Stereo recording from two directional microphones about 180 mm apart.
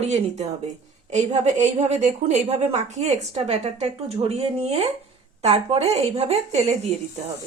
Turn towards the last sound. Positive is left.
turn(degrees=-35)  # may be behind; listen again after turning